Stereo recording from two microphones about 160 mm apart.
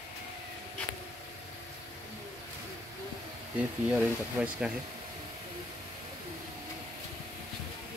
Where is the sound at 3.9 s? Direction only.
5° right (ahead or behind).